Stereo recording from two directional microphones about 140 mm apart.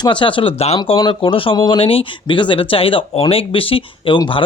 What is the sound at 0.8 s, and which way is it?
Speech, 30° left (ahead or behind).